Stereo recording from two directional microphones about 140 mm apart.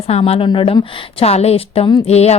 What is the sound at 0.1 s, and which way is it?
A woman's voice, 45° left (ahead or behind).